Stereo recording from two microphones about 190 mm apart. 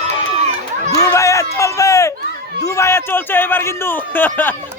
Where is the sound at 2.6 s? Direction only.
15° left (ahead or behind).